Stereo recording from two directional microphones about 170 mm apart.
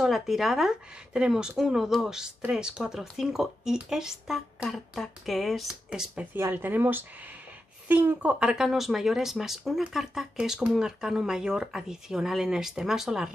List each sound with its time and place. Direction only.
0.0 s speech: centre (ahead or behind)